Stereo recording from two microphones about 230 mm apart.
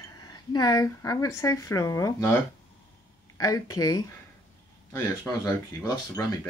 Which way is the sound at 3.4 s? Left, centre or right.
Centre.